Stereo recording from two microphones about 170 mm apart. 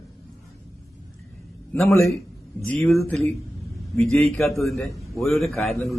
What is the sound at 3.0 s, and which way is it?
A man's voice, 10° left (ahead or behind).